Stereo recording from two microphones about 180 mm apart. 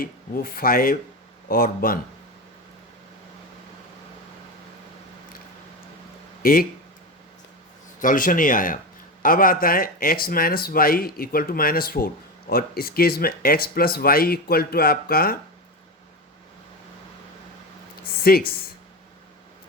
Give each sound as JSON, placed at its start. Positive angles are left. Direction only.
{"t": 0.0, "sound": "speech", "side_deg": 55}
{"t": 6.4, "sound": "speech", "side_deg": 55}
{"t": 7.9, "sound": "speech", "side_deg": 50}
{"t": 18.2, "sound": "speech", "side_deg": 55}